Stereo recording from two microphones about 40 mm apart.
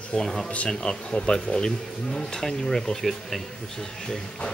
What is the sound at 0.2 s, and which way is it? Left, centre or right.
Speech, centre.